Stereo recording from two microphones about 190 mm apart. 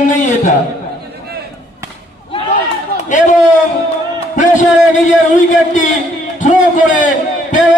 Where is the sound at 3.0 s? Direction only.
40° left (ahead or behind).